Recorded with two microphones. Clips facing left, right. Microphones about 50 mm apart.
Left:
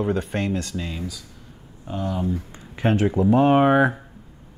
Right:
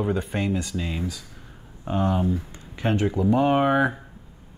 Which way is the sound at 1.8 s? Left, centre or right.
Right.